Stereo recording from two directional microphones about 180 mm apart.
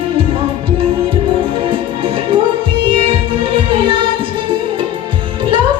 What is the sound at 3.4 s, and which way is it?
Music, 30° right (ahead or behind).